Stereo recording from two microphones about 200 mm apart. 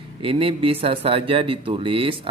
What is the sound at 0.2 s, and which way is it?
Speech, 25° right (ahead or behind).